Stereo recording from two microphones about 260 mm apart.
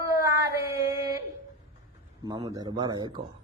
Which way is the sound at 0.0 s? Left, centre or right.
Centre.